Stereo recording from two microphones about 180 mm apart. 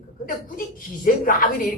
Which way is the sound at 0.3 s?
50° left (ahead or behind).